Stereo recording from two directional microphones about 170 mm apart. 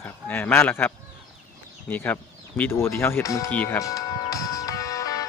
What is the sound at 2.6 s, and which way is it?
Speech, 15° left (ahead or behind).